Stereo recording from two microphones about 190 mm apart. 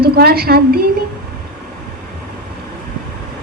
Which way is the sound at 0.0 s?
55° right (ahead or behind).